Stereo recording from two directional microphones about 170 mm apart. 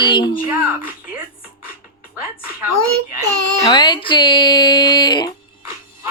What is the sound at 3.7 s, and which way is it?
Music, 25° left (ahead or behind).